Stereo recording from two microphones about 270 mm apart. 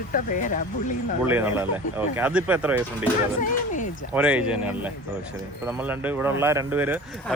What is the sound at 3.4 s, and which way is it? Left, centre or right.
Speech, left.